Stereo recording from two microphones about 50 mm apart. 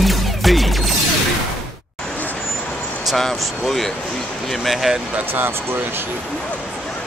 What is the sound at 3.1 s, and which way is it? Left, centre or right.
Vehicle, centre.